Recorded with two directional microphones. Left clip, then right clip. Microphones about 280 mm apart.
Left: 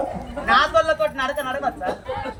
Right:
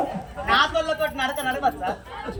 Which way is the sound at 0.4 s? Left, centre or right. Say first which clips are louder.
Left 4 dB; centre.